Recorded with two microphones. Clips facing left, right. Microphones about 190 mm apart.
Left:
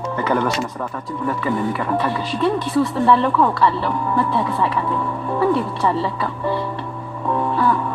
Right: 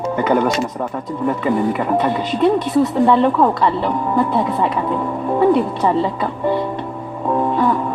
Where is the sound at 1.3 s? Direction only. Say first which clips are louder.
Right 4 dB; 20° right (ahead or behind).